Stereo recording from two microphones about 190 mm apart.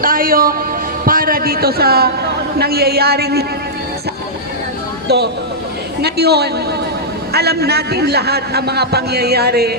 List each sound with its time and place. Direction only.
0.0 s a sound: 50° right (ahead or behind)
1.0 s a man's voice: 50° right (ahead or behind)
5.0 s a woman's voice: 60° right (ahead or behind)